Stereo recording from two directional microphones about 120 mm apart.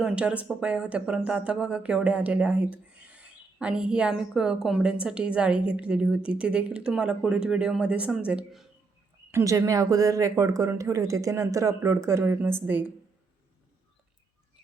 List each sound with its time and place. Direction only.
0.0 s speech: 10° right (ahead or behind)
9.3 s speech: 25° right (ahead or behind)